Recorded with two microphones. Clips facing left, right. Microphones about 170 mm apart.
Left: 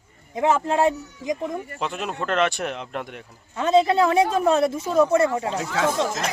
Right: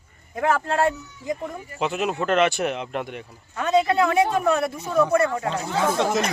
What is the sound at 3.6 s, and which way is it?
Speech, 25° left (ahead or behind).